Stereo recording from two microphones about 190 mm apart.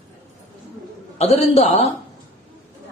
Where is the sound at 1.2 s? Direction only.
30° left (ahead or behind).